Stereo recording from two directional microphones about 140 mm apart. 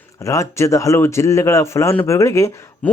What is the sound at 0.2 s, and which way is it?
Speech, 20° left (ahead or behind).